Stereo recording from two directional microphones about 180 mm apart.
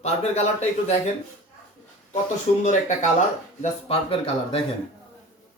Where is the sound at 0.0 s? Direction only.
35° left (ahead or behind).